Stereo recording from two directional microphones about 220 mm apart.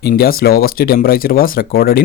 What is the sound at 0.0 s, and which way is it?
Speech, 45° left (ahead or behind).